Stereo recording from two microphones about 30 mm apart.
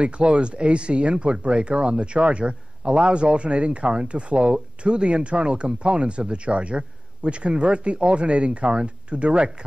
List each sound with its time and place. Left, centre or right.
0.0 s speech: right